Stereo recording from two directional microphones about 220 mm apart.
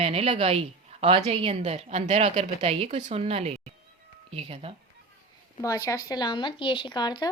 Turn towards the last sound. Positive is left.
turn(degrees=20)  # may be behind; listen again after turning